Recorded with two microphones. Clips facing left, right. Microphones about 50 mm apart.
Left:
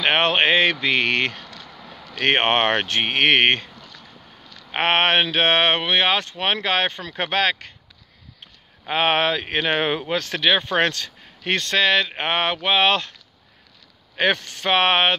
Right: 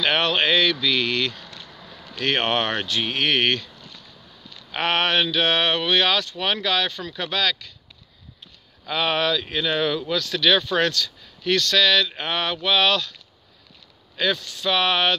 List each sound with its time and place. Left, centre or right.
0.0 s speech: left
1.7 s a sound: centre
2.1 s speech: left
4.0 s vehicle: left
4.6 s speech: left
8.8 s speech: left
14.1 s speech: left